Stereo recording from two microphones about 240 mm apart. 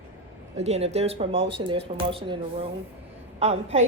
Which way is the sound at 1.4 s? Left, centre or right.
Right.